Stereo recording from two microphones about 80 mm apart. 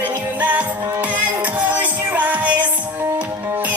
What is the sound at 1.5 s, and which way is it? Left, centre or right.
Music, centre.